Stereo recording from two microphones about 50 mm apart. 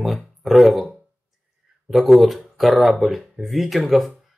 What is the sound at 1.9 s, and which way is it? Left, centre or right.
Speech, centre.